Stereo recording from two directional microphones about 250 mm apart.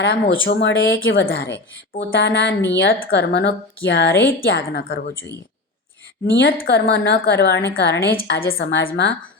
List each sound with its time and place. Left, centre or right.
0.0 s speech: left
1.1 s a woman's voice: left
6.4 s a woman's voice: left